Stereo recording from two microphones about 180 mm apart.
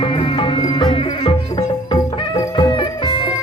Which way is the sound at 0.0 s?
30° left (ahead or behind).